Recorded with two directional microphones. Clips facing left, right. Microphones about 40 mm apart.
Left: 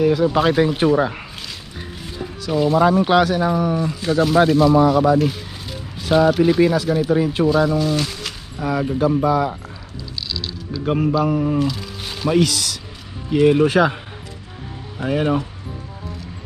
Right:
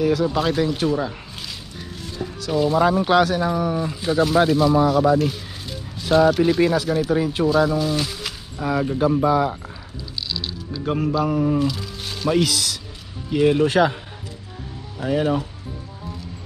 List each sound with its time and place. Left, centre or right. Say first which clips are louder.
0.0 s speech: left 4 dB; centre; by 1.2 s left
2.4 s speech: left 2 dB; centre
9.0 s speech: left 1 dB; centre
10.2 s music: even; centre
10.8 s speech: left 3 dB; centre
12.4 s speech: even; centre
15.0 s speech: left 1 dB; left